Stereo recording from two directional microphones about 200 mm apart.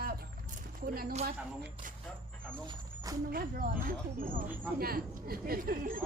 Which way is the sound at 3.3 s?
45° right (ahead or behind).